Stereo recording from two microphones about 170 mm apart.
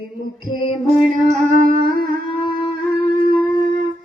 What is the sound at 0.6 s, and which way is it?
Music, 50° left (ahead or behind).